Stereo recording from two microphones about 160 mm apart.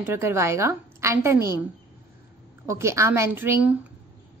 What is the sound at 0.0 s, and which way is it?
A woman's voice, 15° right (ahead or behind).